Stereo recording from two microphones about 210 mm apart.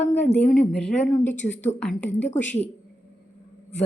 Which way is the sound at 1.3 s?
60° left (ahead or behind).